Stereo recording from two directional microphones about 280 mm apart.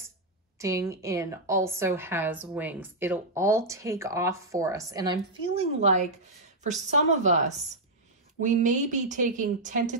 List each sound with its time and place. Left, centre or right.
0.6 s a woman's voice: centre; by 9.9 s right